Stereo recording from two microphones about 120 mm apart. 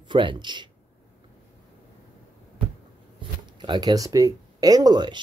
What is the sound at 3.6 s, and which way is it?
Speech, 35° right (ahead or behind).